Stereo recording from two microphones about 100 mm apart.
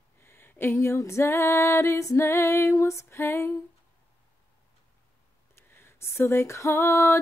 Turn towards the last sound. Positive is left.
turn(degrees=25)  # may be behind; listen again after turning